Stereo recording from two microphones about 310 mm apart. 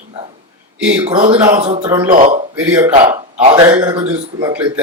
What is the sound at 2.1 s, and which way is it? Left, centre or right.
Speech, right.